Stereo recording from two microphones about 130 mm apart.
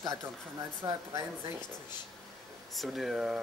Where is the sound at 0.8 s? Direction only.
25° right (ahead or behind).